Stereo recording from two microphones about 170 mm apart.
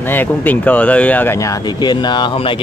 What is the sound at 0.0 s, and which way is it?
Speech, 10° left (ahead or behind).